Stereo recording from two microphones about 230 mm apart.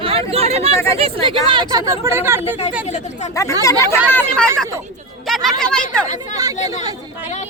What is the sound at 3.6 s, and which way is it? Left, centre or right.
Speech, centre.